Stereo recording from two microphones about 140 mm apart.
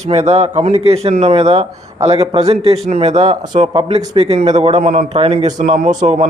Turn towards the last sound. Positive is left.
turn(degrees=-60)  # may be behind; listen again after turning